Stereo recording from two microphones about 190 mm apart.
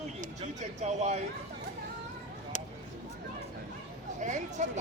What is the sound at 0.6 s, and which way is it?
Speech, 35° right (ahead or behind).